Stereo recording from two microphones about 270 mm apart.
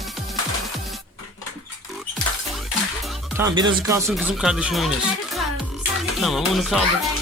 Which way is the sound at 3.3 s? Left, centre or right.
Centre.